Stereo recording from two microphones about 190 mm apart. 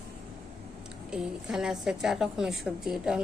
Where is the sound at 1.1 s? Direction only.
5° right (ahead or behind).